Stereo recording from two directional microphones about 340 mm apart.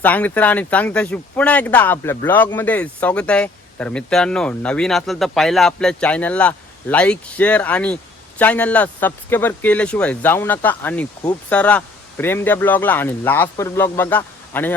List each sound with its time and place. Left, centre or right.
0.0 s speech: centre